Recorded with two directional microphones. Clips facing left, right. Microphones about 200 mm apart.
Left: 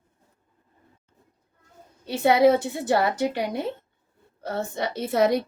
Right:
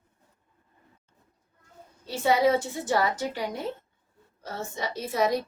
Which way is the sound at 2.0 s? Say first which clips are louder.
Left 5 dB; 65° left (ahead or behind).